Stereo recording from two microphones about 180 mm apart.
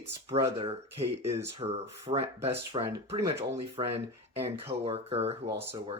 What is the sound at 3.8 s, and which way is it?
Speech, 35° right (ahead or behind).